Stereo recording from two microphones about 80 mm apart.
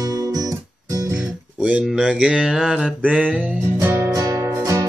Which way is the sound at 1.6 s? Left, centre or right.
Centre.